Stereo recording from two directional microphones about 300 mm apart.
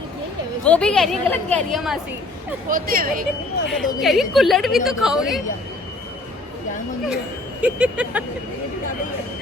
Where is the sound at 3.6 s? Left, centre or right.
Centre.